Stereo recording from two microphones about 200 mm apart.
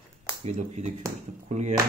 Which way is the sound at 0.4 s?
35° right (ahead or behind).